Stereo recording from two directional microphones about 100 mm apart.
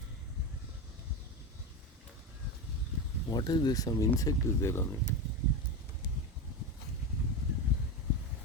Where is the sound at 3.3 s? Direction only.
45° left (ahead or behind); by 4.8 s 25° left (ahead or behind).